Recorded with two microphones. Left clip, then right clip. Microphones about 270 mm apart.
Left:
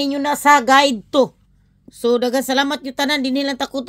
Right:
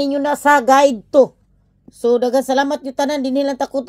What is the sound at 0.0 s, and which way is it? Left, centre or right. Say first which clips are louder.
A woman's voice: right 1 dB; left.